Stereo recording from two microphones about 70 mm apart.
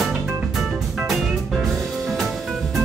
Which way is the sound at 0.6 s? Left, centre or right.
Centre.